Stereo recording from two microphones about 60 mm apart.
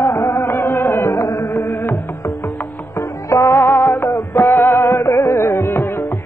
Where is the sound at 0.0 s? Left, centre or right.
Left.